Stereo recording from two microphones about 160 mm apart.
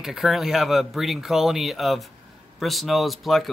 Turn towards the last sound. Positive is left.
turn(degrees=0)  # may be behind; listen again after turning